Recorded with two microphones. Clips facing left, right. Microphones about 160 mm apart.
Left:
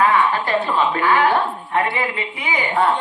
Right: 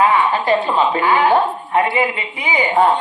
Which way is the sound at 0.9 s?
15° right (ahead or behind).